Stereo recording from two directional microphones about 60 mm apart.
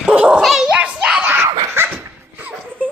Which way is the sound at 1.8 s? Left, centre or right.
Right.